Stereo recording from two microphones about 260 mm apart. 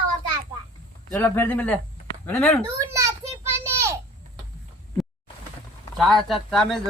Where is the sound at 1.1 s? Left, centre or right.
Centre.